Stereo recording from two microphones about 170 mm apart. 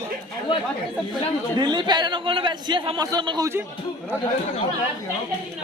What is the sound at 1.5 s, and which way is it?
A man's voice, 25° right (ahead or behind).